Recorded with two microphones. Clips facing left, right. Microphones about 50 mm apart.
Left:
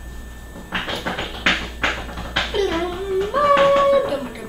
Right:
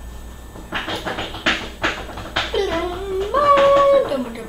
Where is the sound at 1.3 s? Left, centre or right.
Centre.